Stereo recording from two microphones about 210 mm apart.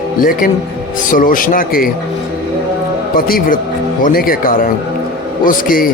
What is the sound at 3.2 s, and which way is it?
A man's voice, 45° left (ahead or behind).